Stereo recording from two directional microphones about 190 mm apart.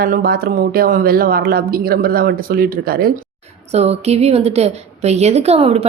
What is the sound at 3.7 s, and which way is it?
A woman's voice, 35° right (ahead or behind).